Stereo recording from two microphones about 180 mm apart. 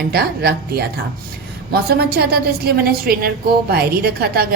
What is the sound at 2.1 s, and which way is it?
A woman's voice, 60° right (ahead or behind).